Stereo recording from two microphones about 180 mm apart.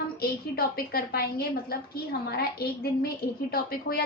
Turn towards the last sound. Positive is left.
turn(degrees=55)  # may be behind; listen again after turning